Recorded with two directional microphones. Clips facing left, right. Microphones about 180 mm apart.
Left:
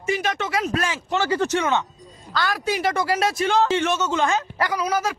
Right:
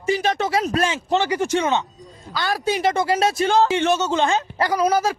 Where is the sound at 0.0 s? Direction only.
30° right (ahead or behind).